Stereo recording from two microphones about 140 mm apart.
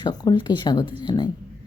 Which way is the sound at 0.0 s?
30° left (ahead or behind).